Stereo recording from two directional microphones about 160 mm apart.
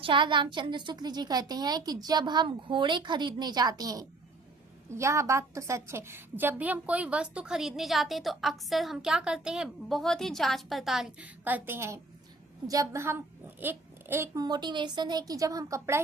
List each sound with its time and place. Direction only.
0.0 s a woman's voice: 30° right (ahead or behind)